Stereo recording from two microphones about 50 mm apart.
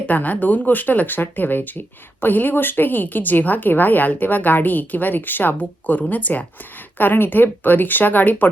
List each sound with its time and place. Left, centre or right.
0.1 s speech: left
7.0 s speech: left